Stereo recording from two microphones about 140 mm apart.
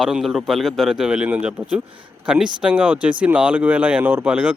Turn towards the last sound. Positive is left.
turn(degrees=-10)  # may be behind; listen again after turning